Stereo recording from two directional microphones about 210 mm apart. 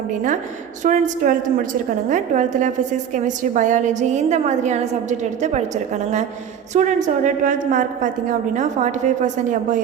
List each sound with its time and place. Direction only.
0.1 s a woman's voice: 40° right (ahead or behind)